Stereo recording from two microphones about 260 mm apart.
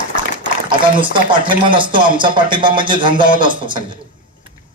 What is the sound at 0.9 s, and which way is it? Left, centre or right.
Speech, centre.